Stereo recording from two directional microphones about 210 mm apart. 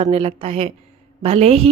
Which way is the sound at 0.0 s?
30° right (ahead or behind).